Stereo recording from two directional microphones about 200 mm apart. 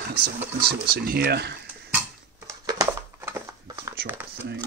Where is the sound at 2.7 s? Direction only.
15° right (ahead or behind).